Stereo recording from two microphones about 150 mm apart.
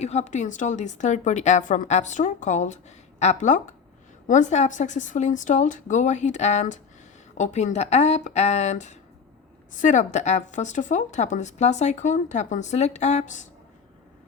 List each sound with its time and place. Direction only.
0.0 s a woman's voice: 50° left (ahead or behind)